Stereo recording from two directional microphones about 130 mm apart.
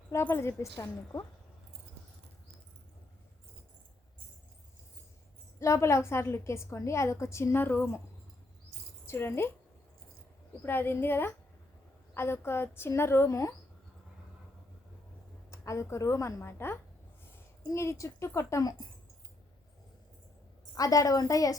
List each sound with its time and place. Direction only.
0.1 s a woman's voice: 20° left (ahead or behind)
5.5 s a woman's voice: 20° left (ahead or behind)
9.0 s speech: 20° left (ahead or behind)
10.6 s a woman's voice: 15° left (ahead or behind)
15.4 s a woman's voice: 25° left (ahead or behind)
20.7 s a woman's voice: 25° left (ahead or behind)